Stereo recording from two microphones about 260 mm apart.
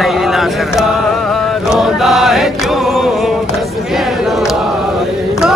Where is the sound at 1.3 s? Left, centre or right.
Centre.